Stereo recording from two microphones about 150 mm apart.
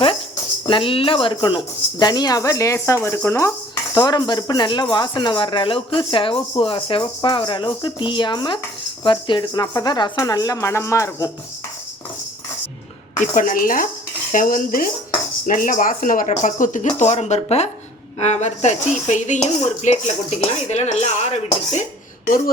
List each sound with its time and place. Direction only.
0.7 s speech: 35° left (ahead or behind); by 11.3 s 20° left (ahead or behind)
13.3 s speech: 65° left (ahead or behind)
14.3 s cutlery: 70° left (ahead or behind)
15.4 s speech: 65° left (ahead or behind); by 21.8 s 45° left (ahead or behind)